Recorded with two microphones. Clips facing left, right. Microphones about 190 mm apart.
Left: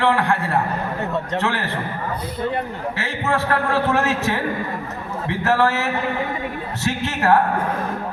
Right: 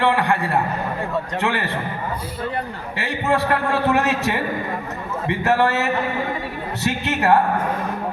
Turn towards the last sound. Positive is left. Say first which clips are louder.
# even
turn(degrees=-15)  # may be behind; listen again after turning